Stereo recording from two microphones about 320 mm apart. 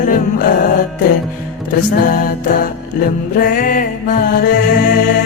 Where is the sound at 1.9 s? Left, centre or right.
Left.